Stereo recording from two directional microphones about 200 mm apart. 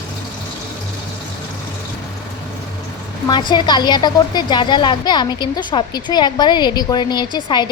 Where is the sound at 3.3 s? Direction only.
20° left (ahead or behind).